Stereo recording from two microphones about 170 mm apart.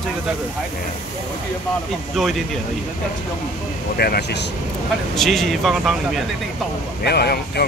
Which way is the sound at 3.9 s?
65° left (ahead or behind).